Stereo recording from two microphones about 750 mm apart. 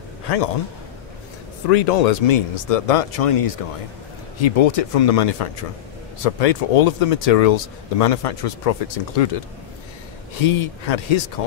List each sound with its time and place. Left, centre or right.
1.7 s speech: left
10.4 s speech: left